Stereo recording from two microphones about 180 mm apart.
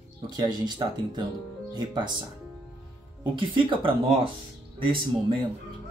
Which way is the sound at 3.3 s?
30° right (ahead or behind).